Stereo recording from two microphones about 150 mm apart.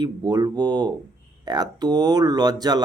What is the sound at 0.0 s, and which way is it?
Speech, 25° right (ahead or behind).